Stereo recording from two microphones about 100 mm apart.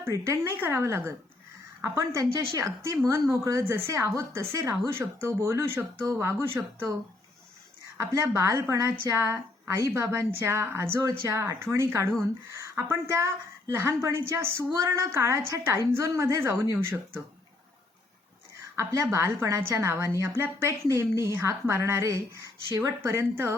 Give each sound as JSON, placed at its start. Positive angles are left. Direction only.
{"t": 0.0, "sound": "a woman's voice", "side_deg": -25}
{"t": 7.9, "sound": "a woman's voice", "side_deg": -30}
{"t": 18.8, "sound": "a woman's voice", "side_deg": -30}
{"t": 23.0, "sound": "a woman's voice", "side_deg": -25}